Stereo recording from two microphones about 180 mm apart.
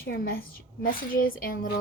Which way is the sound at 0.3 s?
50° left (ahead or behind).